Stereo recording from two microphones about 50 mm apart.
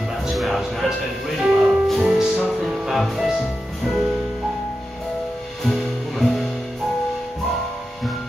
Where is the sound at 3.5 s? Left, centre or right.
Centre.